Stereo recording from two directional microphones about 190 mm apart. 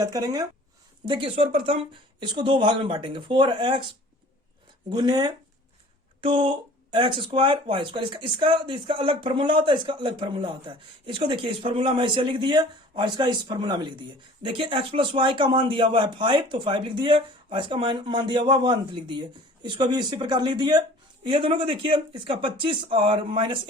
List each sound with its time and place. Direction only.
0.0 s speech: 20° right (ahead or behind)
4.9 s speech: 20° right (ahead or behind)